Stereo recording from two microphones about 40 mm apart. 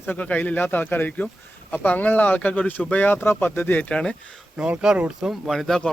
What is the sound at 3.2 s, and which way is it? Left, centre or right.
Speech, left.